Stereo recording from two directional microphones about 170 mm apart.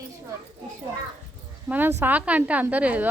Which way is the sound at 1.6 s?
10° right (ahead or behind).